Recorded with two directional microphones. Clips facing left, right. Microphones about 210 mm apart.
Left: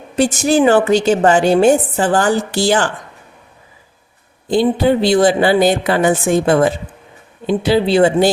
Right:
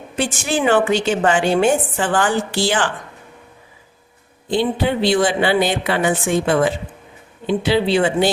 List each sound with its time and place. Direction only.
0.2 s a woman's voice: 40° left (ahead or behind)
4.4 s a woman's voice: 40° left (ahead or behind)